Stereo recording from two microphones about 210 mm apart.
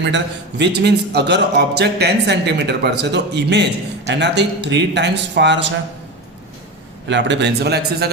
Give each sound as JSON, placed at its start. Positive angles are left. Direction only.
{"t": 0.6, "sound": "speech", "side_deg": -50}
{"t": 7.1, "sound": "a man's voice", "side_deg": -60}